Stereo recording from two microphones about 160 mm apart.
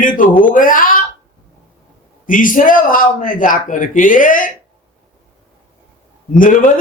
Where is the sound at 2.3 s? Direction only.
55° left (ahead or behind).